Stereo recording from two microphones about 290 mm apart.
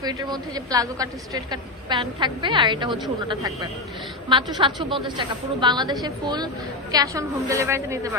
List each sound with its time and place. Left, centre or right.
0.0 s a woman's voice: centre